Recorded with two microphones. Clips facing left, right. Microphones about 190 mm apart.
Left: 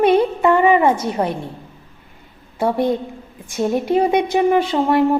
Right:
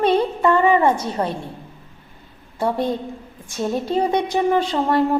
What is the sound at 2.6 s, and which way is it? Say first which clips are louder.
Speech: left 3 dB; 15° left (ahead or behind).